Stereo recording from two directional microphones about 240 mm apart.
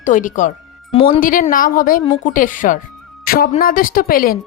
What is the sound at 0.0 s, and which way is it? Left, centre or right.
Speech, left.